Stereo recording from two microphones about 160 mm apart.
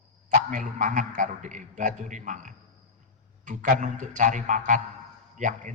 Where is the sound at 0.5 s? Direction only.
50° right (ahead or behind).